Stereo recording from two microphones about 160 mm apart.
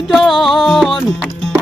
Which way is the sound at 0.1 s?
Centre (ahead or behind).